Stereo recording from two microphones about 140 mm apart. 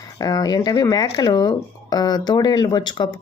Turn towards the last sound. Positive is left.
turn(degrees=30)  # may be behind; listen again after turning